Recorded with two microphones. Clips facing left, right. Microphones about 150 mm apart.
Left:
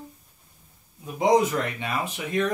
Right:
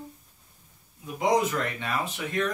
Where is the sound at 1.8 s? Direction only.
20° left (ahead or behind).